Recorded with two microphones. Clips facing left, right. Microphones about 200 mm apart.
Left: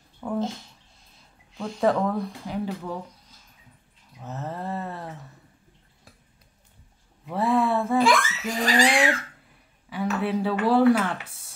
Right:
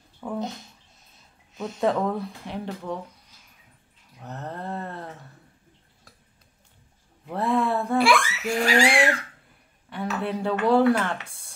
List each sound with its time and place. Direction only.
0.2 s speech: centre (ahead or behind)
1.5 s a sound: 20° right (ahead or behind)
1.8 s speech: centre (ahead or behind)
4.2 s speech: centre (ahead or behind)
7.2 s speech: centre (ahead or behind)
8.0 s a child's voice: 10° right (ahead or behind)